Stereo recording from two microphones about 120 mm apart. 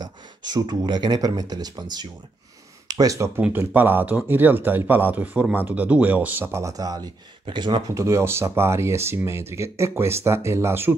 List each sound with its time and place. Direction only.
0.0 s speech: 35° right (ahead or behind)
3.3 s speech: 15° right (ahead or behind)
7.4 s speech: 40° right (ahead or behind)
8.0 s speech: 25° right (ahead or behind)